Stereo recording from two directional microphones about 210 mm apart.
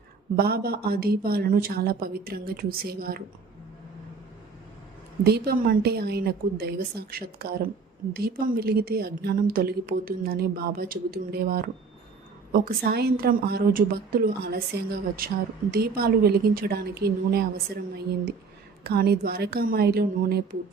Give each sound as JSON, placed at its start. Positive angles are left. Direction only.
{"t": 0.3, "sound": "a woman's voice", "side_deg": -45}
{"t": 5.2, "sound": "a woman's voice", "side_deg": -50}
{"t": 18.8, "sound": "a woman's voice", "side_deg": -45}